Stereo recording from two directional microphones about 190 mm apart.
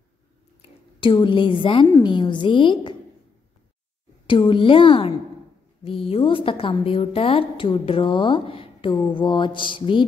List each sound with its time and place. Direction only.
0.6 s a woman's voice: 25° left (ahead or behind)
4.3 s a woman's voice: 25° left (ahead or behind)